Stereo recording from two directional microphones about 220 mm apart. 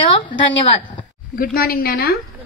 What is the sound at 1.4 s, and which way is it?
Speech, 40° left (ahead or behind).